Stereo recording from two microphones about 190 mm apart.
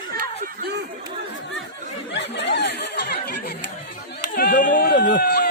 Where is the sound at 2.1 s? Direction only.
70° left (ahead or behind).